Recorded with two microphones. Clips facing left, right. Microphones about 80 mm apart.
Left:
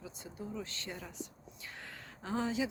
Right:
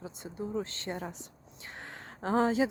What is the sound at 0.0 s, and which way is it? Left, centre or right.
Speech, right.